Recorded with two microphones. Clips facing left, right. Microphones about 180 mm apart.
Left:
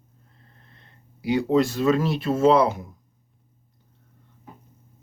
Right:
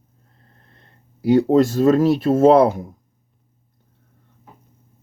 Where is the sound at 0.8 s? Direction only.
45° right (ahead or behind).